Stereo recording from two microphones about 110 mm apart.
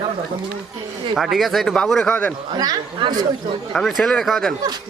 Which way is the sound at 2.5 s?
40° right (ahead or behind).